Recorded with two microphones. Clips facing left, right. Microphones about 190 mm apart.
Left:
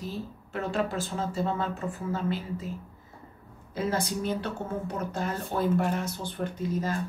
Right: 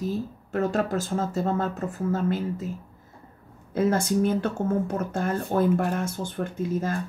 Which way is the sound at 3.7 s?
50° right (ahead or behind).